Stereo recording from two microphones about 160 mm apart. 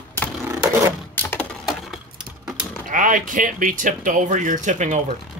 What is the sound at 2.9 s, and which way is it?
Speech, 55° right (ahead or behind).